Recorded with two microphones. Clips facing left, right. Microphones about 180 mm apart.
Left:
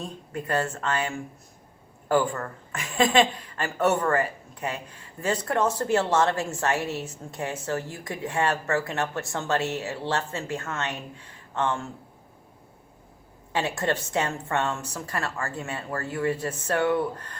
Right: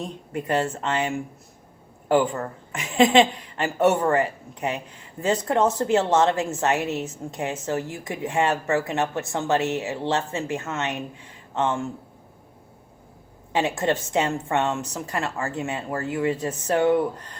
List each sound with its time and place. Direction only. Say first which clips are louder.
0.0 s a woman's voice: right 3 dB; 20° right (ahead or behind)
13.5 s a woman's voice: right 4 dB; 20° right (ahead or behind)